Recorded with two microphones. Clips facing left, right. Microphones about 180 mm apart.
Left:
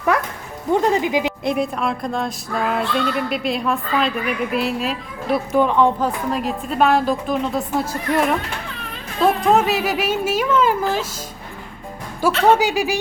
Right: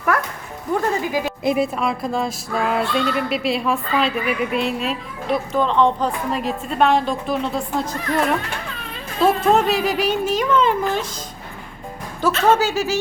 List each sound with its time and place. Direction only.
0.7 s speech: 20° left (ahead or behind)
1.5 s music: 5° right (ahead or behind)
9.5 s music: centre (ahead or behind)
12.2 s speech: 15° left (ahead or behind)